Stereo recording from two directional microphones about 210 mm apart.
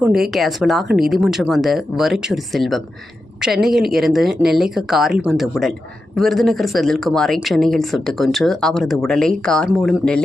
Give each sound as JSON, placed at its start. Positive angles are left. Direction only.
{"t": 0.0, "sound": "speech", "side_deg": 0}